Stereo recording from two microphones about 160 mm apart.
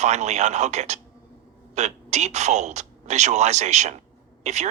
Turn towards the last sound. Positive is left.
turn(degrees=-45)  # may be behind; listen again after turning